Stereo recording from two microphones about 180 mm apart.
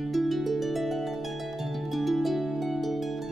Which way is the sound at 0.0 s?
Centre (ahead or behind).